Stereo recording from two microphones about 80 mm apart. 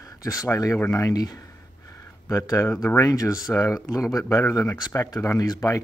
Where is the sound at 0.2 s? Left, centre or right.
Left.